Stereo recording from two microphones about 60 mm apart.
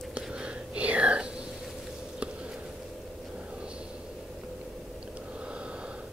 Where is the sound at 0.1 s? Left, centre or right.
Right.